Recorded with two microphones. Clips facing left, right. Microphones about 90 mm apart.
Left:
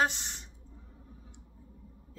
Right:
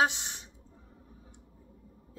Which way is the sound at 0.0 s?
15° right (ahead or behind).